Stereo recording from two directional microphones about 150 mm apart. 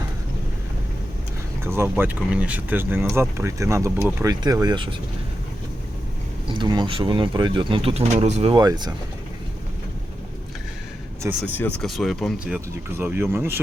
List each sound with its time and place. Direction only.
1.6 s speech: 15° right (ahead or behind); by 4.9 s 30° right (ahead or behind)
6.5 s speech: 30° right (ahead or behind)
8.5 s speech: 30° right (ahead or behind)
11.5 s speech: 10° left (ahead or behind)
11.9 s speech: centre (ahead or behind)
13.0 s speech: 15° right (ahead or behind)